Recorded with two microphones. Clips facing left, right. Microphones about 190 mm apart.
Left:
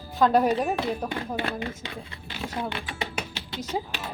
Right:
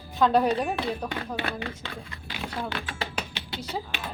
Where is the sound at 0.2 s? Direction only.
5° left (ahead or behind).